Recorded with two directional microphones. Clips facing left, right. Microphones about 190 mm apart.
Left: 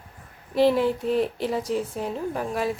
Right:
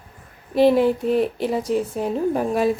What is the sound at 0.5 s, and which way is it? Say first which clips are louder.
Speech: right 4 dB; 15° right (ahead or behind).